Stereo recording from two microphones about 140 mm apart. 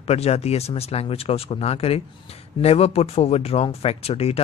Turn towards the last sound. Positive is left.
turn(degrees=45)  # may be behind; listen again after turning